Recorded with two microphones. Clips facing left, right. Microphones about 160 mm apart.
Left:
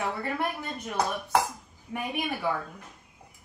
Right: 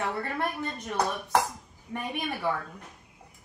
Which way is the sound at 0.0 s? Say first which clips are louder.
Even; 5° left (ahead or behind).